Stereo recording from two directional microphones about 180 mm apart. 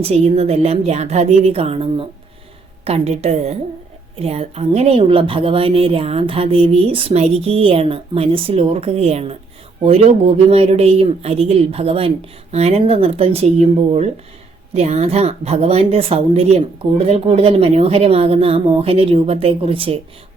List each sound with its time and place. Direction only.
0.0 s speech: 35° right (ahead or behind)